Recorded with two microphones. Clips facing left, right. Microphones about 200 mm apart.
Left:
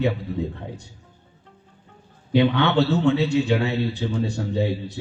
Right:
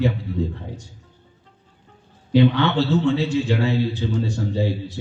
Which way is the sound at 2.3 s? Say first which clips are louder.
Right 1 dB; 60° left (ahead or behind).